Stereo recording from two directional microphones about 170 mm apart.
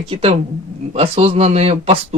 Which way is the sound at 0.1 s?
35° right (ahead or behind).